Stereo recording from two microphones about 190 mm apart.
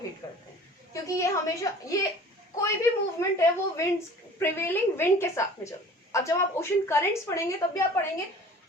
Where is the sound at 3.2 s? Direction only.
15° left (ahead or behind).